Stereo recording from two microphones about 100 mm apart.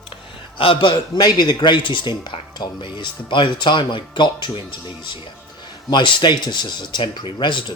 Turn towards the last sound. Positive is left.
turn(degrees=50)  # may be behind; listen again after turning